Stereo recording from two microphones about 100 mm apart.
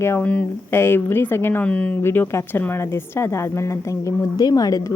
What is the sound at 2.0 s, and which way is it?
A woman's voice, 25° left (ahead or behind).